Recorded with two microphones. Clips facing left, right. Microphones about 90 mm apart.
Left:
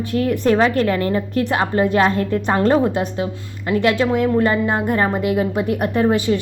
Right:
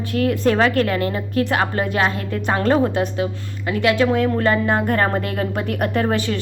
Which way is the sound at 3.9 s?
20° left (ahead or behind).